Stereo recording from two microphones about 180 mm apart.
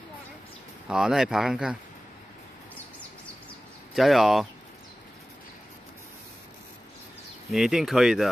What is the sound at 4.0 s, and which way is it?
Speech, centre (ahead or behind).